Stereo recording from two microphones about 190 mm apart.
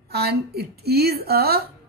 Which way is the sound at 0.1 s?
55° right (ahead or behind).